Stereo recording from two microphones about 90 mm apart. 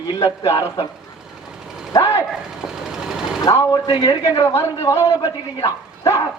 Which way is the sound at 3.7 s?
40° left (ahead or behind).